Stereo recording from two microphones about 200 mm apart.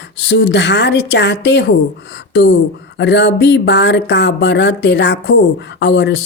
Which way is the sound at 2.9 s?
60° left (ahead or behind).